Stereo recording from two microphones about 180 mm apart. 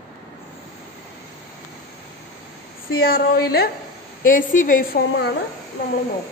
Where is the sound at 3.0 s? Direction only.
55° left (ahead or behind).